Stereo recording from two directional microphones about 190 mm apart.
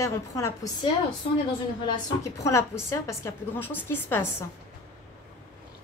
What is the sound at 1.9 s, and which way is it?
A woman's voice, 20° left (ahead or behind).